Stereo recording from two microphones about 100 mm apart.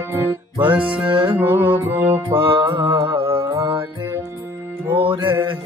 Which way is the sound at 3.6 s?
65° right (ahead or behind).